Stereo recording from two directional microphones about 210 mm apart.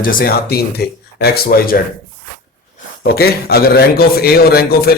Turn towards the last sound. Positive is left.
turn(degrees=50)  # may be behind; listen again after turning